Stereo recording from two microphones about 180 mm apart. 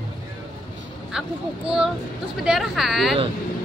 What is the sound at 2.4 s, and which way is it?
Speech, centre (ahead or behind).